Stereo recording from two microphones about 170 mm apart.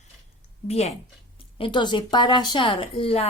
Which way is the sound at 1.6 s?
25° left (ahead or behind).